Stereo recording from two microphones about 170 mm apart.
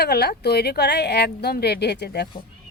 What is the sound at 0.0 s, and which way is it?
Speech, 70° left (ahead or behind).